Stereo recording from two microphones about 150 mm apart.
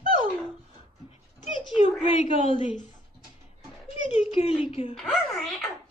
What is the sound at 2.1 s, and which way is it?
Speech, 45° left (ahead or behind).